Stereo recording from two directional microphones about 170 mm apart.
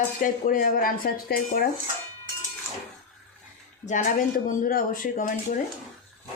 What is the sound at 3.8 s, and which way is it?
A woman's voice, 50° left (ahead or behind).